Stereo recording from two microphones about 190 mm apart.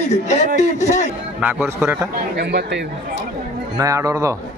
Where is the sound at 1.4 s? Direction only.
10° right (ahead or behind).